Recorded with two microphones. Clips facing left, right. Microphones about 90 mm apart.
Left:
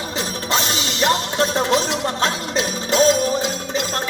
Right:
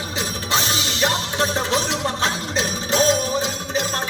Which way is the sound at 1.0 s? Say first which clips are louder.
Left 4 dB; 40° left (ahead or behind).